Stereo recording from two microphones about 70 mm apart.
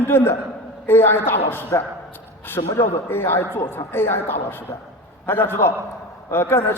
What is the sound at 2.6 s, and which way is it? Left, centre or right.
Speech, left.